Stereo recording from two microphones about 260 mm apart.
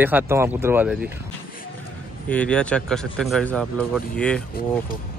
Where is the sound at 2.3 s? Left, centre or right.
Centre.